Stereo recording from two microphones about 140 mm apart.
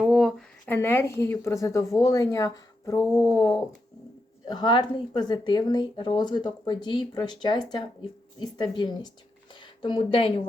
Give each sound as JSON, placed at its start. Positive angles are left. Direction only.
{"t": 0.0, "sound": "a sound", "side_deg": 0}
{"t": 0.7, "sound": "speech", "side_deg": 20}
{"t": 4.4, "sound": "a woman's voice", "side_deg": 30}